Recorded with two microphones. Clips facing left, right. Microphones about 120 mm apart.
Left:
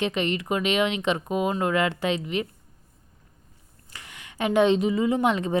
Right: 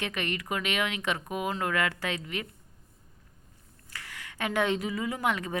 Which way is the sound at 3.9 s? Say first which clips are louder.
Left 2 dB; 20° left (ahead or behind).